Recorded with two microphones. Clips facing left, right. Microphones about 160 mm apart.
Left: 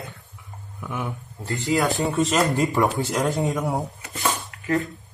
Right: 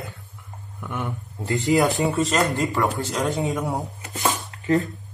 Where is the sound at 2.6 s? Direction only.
15° left (ahead or behind).